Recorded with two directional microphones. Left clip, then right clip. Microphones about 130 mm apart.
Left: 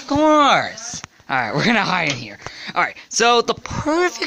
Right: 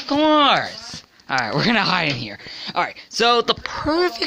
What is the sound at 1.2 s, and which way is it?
Speech, 10° left (ahead or behind).